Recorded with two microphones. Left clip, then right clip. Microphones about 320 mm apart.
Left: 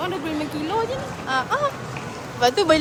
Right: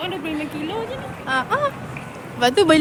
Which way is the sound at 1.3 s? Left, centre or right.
Right.